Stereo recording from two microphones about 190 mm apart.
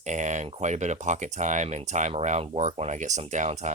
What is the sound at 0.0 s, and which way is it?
Speech, 40° right (ahead or behind).